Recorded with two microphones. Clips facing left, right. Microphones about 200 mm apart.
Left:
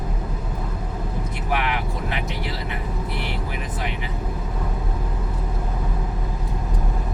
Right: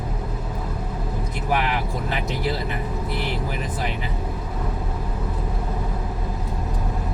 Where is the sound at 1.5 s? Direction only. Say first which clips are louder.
Right 2 dB; 35° right (ahead or behind).